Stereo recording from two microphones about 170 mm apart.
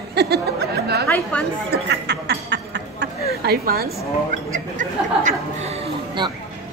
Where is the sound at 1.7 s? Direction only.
80° right.